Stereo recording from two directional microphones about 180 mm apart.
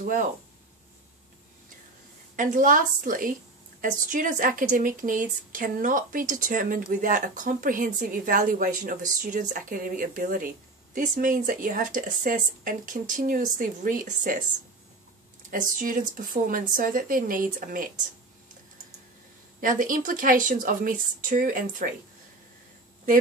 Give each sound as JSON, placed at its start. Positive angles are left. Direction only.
{"t": 0.0, "sound": "speech", "side_deg": -50}
{"t": 2.3, "sound": "speech", "side_deg": -45}
{"t": 15.5, "sound": "speech", "side_deg": -45}
{"t": 19.6, "sound": "speech", "side_deg": -50}